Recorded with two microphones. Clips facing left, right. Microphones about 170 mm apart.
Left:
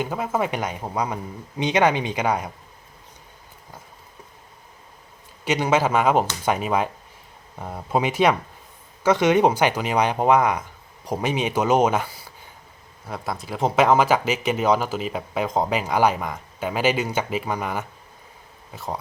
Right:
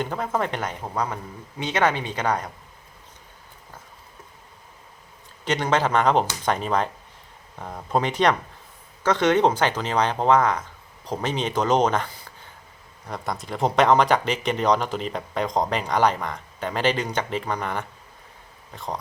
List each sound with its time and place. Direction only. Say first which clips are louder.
0.0 s speech: left 1 dB; 5° left (ahead or behind)
5.5 s speech: left 2 dB; 10° left (ahead or behind)